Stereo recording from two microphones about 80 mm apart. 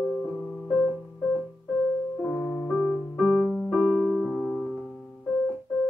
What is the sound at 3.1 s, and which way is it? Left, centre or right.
Music, centre.